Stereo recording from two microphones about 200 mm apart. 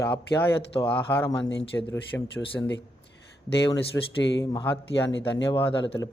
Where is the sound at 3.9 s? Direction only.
15° left (ahead or behind).